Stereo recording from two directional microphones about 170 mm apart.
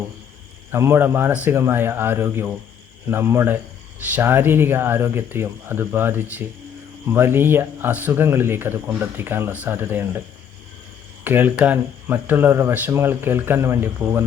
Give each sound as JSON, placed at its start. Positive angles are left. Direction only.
{"t": 0.7, "sound": "speech", "side_deg": -15}
{"t": 11.2, "sound": "speech", "side_deg": -10}